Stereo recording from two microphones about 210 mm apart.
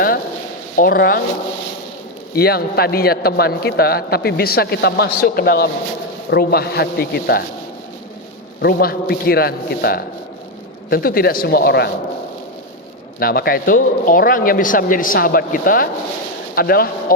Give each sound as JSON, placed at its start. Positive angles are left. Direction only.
{"t": 0.8, "sound": "speech", "side_deg": 45}
{"t": 2.3, "sound": "speech", "side_deg": 45}
{"t": 8.6, "sound": "speech", "side_deg": 45}
{"t": 13.1, "sound": "speech", "side_deg": 45}